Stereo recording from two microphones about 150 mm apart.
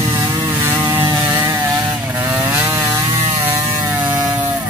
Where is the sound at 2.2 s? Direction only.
15° right (ahead or behind).